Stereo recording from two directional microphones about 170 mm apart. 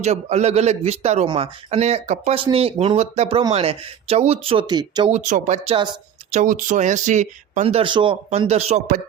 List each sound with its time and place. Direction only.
0.0 s speech: 40° right (ahead or behind); by 5.0 s 25° right (ahead or behind)
5.0 s speech: 45° right (ahead or behind)